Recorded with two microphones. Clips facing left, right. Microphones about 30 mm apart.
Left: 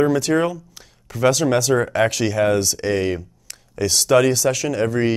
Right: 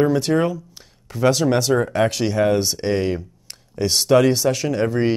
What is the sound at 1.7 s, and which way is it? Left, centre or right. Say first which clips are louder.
Speech: left 1 dB; centre.